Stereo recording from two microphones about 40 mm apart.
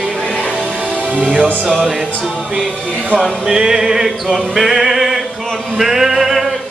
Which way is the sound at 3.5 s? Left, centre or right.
Centre.